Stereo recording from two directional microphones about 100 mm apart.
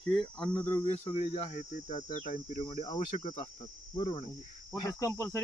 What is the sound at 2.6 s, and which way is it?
Cricket, 70° left (ahead or behind).